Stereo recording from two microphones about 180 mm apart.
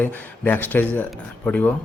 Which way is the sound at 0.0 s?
10° left (ahead or behind).